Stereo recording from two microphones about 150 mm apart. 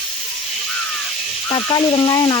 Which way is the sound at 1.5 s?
35° left (ahead or behind).